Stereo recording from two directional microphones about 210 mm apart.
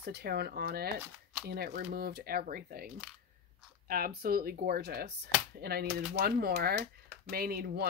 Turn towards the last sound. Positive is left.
turn(degrees=-45)  # may be behind; listen again after turning